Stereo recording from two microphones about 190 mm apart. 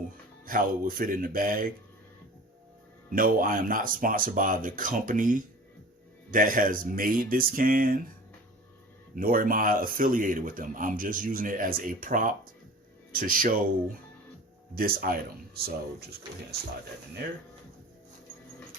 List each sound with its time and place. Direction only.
0.4 s a man's voice: 50° right (ahead or behind)
3.1 s a man's voice: 50° right (ahead or behind)
9.1 s a man's voice: 50° right (ahead or behind)
14.8 s a man's voice: 50° right (ahead or behind)